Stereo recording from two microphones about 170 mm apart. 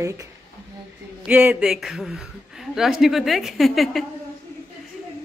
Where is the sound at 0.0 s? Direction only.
20° right (ahead or behind).